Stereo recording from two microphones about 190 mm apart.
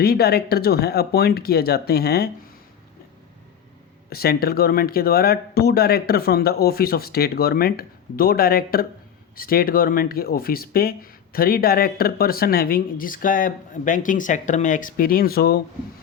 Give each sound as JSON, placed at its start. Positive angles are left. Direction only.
{"t": 0.0, "sound": "speech", "side_deg": 55}
{"t": 4.1, "sound": "speech", "side_deg": 55}